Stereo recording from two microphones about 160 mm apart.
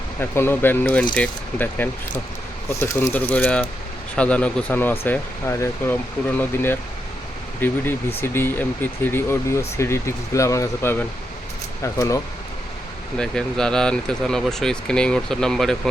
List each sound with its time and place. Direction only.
0.2 s speech: 15° left (ahead or behind)
13.1 s speech: 5° left (ahead or behind)